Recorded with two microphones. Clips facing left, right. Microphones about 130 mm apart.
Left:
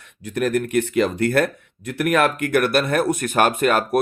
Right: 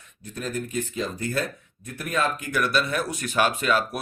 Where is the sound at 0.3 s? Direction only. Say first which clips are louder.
Left 10 dB; 75° left (ahead or behind).